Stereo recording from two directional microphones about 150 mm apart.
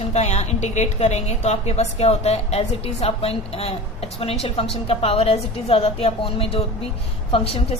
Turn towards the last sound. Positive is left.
turn(degrees=40)  # may be behind; listen again after turning